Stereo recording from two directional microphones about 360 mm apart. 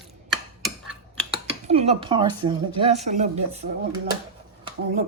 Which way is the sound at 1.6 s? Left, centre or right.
Centre.